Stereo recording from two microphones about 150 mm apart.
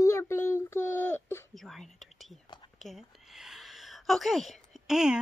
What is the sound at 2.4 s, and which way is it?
Whispering, 30° left (ahead or behind).